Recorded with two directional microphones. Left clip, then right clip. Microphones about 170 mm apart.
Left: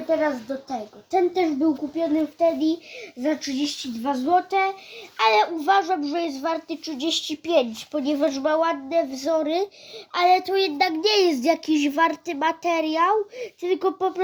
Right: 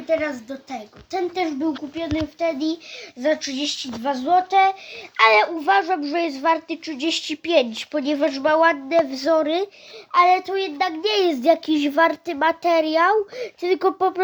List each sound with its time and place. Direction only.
0.1 s speech: 20° right (ahead or behind)
2.0 s speech: 30° right (ahead or behind)
3.2 s speech: 20° right (ahead or behind)
7.9 s speech: 15° right (ahead or behind); by 9.5 s 35° right (ahead or behind)
10.1 s a child's voice: 5° right (ahead or behind); by 14.1 s 45° right (ahead or behind)